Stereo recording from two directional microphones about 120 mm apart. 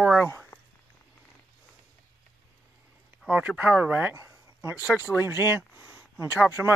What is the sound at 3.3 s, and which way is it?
Speech, 10° right (ahead or behind).